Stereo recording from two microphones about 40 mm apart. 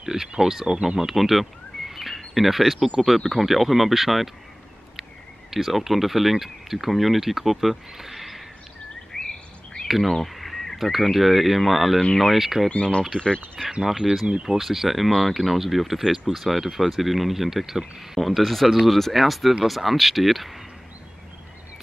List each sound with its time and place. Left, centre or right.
0.0 s speech: centre
5.5 s speech: centre
9.1 s bird vocalization: centre
9.8 s speech: centre
12.6 s speech: left
13.8 s speech: centre